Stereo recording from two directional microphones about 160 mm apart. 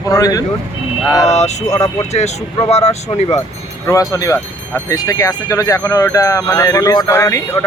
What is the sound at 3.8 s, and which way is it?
Speech, 20° left (ahead or behind).